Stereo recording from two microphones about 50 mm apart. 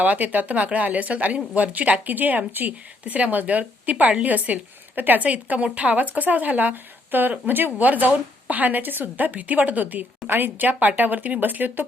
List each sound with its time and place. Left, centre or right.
0.0 s a woman's voice: right